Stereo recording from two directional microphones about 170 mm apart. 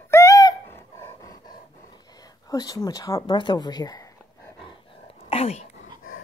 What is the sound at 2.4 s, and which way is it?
Speech, 20° left (ahead or behind).